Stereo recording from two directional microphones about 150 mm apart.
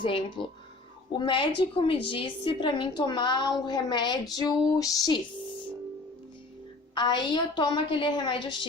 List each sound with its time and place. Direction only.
0.0 s a woman's voice: 35° left (ahead or behind)
6.9 s a woman's voice: 30° left (ahead or behind)